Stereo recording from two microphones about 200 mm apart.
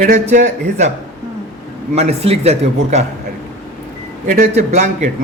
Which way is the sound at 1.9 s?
30° right (ahead or behind).